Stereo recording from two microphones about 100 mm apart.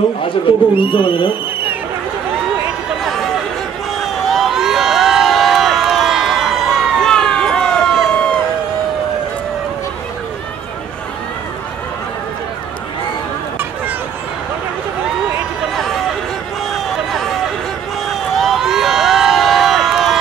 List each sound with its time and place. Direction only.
0.7 s speech: 55° left (ahead or behind)
4.0 s crowd: centre (ahead or behind)
16.7 s run: centre (ahead or behind)
18.3 s crowd: centre (ahead or behind)